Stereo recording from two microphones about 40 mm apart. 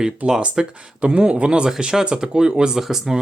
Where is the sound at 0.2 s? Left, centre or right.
Right.